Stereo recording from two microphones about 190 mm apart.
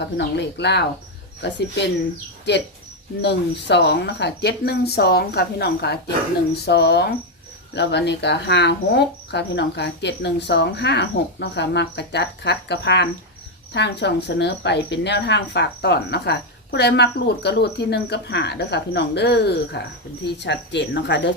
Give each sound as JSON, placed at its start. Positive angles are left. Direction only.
{"t": 0.2, "sound": "a woman's voice", "side_deg": 65}